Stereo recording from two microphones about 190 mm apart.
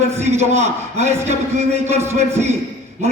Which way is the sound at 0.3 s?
35° right (ahead or behind).